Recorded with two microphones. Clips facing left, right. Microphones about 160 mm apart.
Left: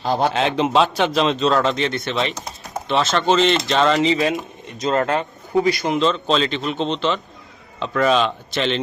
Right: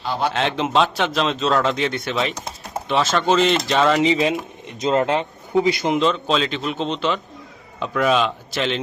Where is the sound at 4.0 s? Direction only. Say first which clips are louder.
Even; 15° right (ahead or behind).